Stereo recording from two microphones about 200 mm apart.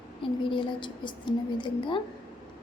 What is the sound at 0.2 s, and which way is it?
Speech, 25° left (ahead or behind).